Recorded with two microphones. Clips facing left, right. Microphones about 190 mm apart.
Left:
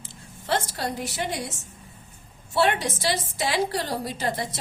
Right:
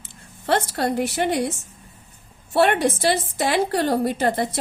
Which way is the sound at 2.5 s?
55° right (ahead or behind).